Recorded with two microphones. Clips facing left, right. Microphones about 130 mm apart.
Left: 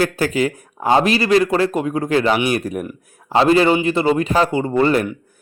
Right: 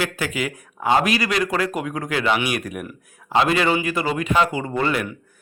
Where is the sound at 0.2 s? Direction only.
35° left (ahead or behind).